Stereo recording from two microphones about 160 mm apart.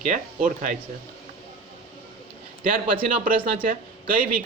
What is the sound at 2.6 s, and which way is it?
A man's voice, 60° right (ahead or behind).